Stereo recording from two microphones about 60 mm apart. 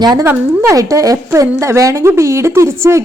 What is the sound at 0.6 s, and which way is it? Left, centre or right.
Speech, right.